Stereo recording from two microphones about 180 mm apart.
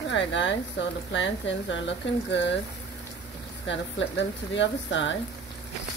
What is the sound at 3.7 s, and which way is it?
Speech, 85° left.